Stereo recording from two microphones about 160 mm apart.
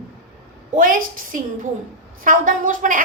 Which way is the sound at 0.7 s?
60° right (ahead or behind).